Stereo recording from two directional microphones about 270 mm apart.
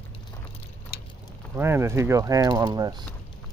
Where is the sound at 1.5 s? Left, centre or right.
Centre.